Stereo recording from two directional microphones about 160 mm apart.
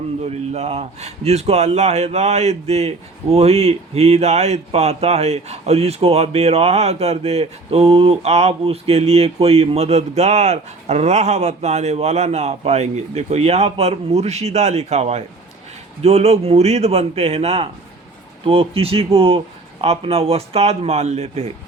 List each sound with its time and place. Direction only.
0.3 s speech: 40° right (ahead or behind)